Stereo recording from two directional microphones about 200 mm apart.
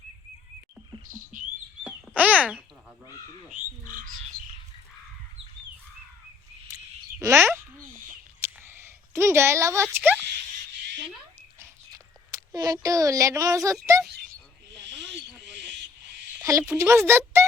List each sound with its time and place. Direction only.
1.3 s bird: 40° right (ahead or behind)
1.8 s bird: 5° right (ahead or behind)
3.5 s bird: 40° right (ahead or behind)
7.2 s a sound: 15° right (ahead or behind)
11.6 s a sound: 15° right (ahead or behind)
13.9 s speech: 15° right (ahead or behind)
14.8 s snake: 60° right (ahead or behind)
15.4 s owl: 60° right (ahead or behind)
16.4 s a woman's voice: 15° right (ahead or behind)